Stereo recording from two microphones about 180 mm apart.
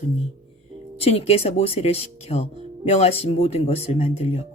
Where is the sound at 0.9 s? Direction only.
35° left (ahead or behind).